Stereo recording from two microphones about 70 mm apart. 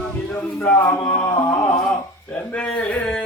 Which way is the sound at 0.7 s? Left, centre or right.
Left.